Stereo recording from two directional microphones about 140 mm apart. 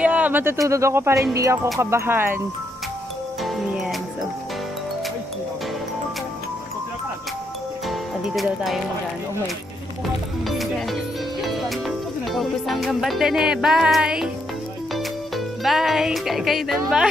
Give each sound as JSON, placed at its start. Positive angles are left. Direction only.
{"t": 0.0, "sound": "a sound", "side_deg": -10}
{"t": 0.7, "sound": "speech", "side_deg": -20}
{"t": 3.4, "sound": "music", "side_deg": 0}
{"t": 7.9, "sound": "music", "side_deg": 0}
{"t": 10.4, "sound": "music", "side_deg": 0}
{"t": 11.4, "sound": "speech", "side_deg": 0}